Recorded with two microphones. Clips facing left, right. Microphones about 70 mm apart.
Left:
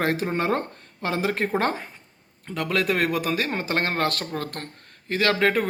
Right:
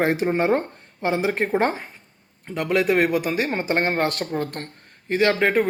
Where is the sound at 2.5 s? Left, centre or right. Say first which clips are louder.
Right 4 dB; centre.